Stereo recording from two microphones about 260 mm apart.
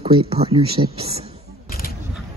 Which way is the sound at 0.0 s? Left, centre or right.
Right.